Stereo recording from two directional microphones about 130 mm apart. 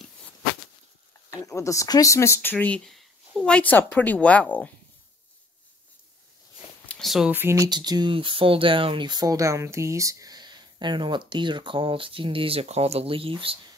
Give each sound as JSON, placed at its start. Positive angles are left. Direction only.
{"t": 1.3, "sound": "speech", "side_deg": 25}
{"t": 6.9, "sound": "a sound", "side_deg": 0}
{"t": 7.2, "sound": "speech", "side_deg": -15}